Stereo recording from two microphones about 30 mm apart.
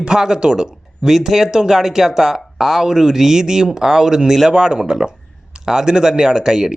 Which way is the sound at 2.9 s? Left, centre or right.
Right.